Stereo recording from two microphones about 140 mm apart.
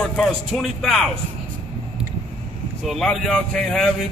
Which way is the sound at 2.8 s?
Centre (ahead or behind).